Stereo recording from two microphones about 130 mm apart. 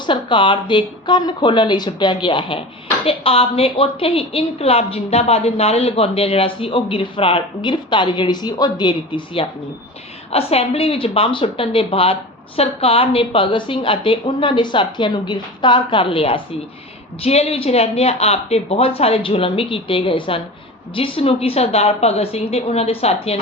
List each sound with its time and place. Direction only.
0.0 s a woman's voice: 40° left (ahead or behind)
17.2 s a woman's voice: 50° left (ahead or behind)